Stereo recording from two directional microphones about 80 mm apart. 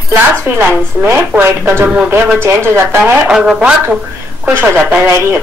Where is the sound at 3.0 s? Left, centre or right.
Centre.